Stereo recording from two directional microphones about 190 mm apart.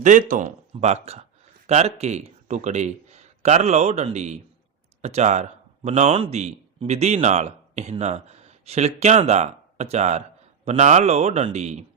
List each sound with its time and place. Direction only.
0.0 s speech: 45° right (ahead or behind)